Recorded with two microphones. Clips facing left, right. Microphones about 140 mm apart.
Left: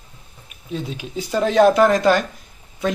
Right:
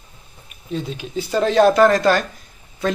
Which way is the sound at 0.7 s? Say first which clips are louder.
Right 2 dB; 10° left (ahead or behind).